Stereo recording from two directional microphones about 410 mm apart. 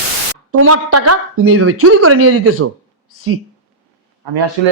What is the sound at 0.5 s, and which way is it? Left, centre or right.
A woman's voice, right.